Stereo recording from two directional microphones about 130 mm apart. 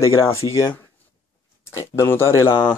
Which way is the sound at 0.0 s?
25° left (ahead or behind).